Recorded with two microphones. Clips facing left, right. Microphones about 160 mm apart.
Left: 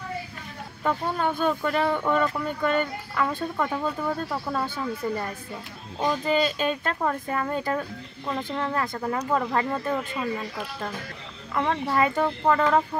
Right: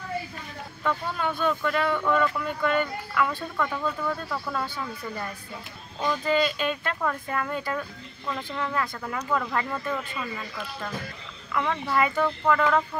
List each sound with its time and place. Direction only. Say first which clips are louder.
1.2 s speech: left 1 dB; 40° left (ahead or behind)
5.9 s speech: left 2 dB; 20° left (ahead or behind)
6.4 s speech: left 2 dB; 40° left (ahead or behind)
11.5 s speech: left 1 dB; 35° left (ahead or behind)